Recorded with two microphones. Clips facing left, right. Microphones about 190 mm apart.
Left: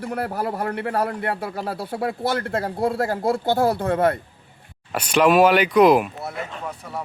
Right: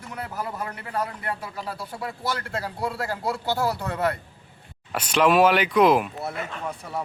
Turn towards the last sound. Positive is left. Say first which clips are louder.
# even
turn(degrees=0)  # may be behind; listen again after turning